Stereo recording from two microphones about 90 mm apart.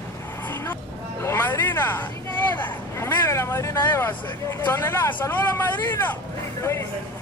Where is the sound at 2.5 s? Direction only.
20° left (ahead or behind).